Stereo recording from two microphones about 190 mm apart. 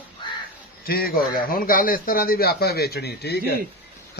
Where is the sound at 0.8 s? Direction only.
50° left (ahead or behind).